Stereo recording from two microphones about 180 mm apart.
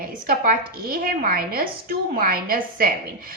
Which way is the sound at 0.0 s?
55° right (ahead or behind).